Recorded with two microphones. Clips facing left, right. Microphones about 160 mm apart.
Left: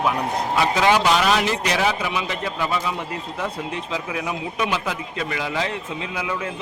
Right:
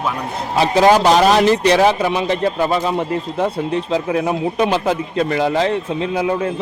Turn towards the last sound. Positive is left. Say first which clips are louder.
# right 9 dB
turn(degrees=-40)  # may be behind; listen again after turning